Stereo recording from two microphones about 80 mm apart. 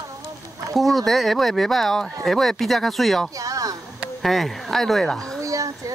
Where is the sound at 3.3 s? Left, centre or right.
Right.